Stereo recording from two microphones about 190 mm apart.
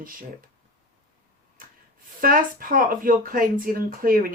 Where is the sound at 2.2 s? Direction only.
50° right (ahead or behind).